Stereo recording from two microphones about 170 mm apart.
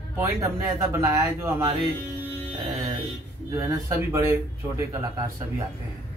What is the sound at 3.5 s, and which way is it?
Speech, 15° right (ahead or behind).